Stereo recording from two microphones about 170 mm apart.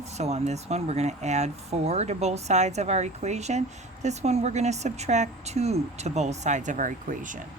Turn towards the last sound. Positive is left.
turn(degrees=-50)  # may be behind; listen again after turning